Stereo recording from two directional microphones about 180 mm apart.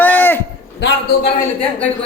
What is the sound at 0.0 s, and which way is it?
Livestock, 10° left (ahead or behind).